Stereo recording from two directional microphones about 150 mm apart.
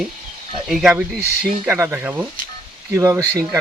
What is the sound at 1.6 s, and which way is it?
Speech, 15° right (ahead or behind).